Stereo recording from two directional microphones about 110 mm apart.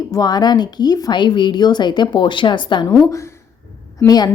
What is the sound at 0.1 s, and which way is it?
A woman's voice, 35° left (ahead or behind).